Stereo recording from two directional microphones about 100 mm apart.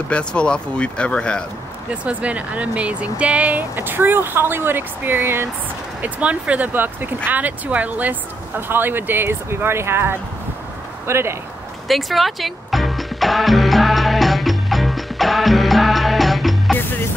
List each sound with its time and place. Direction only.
0.1 s speech: 10° left (ahead or behind)
2.0 s speech: 15° right (ahead or behind)
11.9 s music: centre (ahead or behind)